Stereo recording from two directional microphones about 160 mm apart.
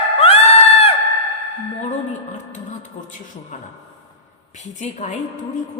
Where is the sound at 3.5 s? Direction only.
50° left (ahead or behind).